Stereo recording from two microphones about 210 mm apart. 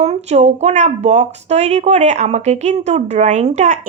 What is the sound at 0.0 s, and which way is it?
A woman's voice, 30° right (ahead or behind).